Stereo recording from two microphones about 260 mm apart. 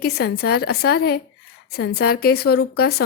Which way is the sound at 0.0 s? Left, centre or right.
Left.